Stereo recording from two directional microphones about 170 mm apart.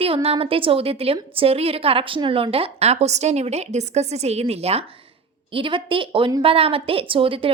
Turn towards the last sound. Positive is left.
turn(degrees=-30)  # may be behind; listen again after turning